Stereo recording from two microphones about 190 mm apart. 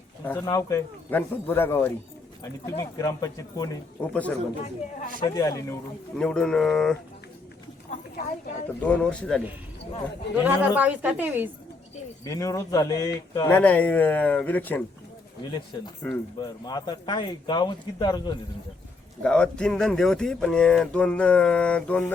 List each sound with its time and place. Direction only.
0.3 s speech: 15° left (ahead or behind)
4.1 s speech: 5° left (ahead or behind)
5.2 s speech: 20° left (ahead or behind)
6.1 s speech: 5° left (ahead or behind)
7.9 s a sound: 45° left (ahead or behind)
8.8 s speech: 5° left (ahead or behind)
10.3 s a woman's voice: 10° right (ahead or behind)
12.2 s speech: 15° left (ahead or behind)
13.5 s speech: 10° left (ahead or behind)
16.0 s speech: 10° left (ahead or behind)
16.4 s speech: 20° left (ahead or behind)
19.2 s speech: 5° left (ahead or behind)